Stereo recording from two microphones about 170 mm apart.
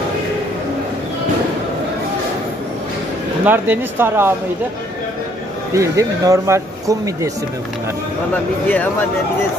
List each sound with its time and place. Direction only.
3.4 s speech: 10° right (ahead or behind)
5.7 s speech: 20° right (ahead or behind)